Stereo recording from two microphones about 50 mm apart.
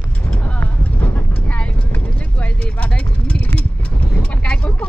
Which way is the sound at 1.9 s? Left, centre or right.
Left.